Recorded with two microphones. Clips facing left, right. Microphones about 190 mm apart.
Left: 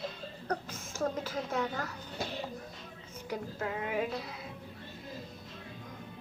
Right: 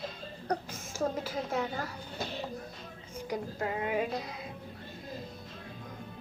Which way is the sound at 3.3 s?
35° right (ahead or behind).